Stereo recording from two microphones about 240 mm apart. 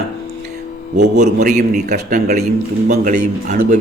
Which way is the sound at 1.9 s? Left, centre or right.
Right.